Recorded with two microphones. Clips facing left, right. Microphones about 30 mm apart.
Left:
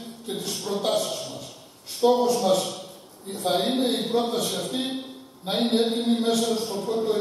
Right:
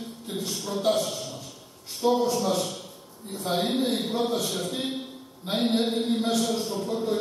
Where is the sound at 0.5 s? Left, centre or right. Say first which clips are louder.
Even; left.